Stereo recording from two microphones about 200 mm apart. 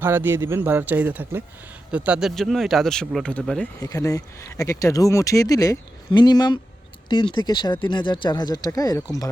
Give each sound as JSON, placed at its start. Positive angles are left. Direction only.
{"t": 0.0, "sound": "speech", "side_deg": -10}
{"t": 3.8, "sound": "speech", "side_deg": 15}